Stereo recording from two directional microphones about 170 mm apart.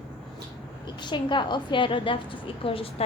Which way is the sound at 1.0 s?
25° left (ahead or behind).